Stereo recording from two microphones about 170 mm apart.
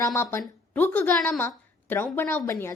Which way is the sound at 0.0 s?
15° left (ahead or behind).